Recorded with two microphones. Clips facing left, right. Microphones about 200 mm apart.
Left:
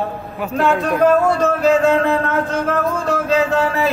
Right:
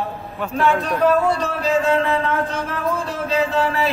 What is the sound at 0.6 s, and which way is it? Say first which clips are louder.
Speech: left 3 dB; 50° left (ahead or behind).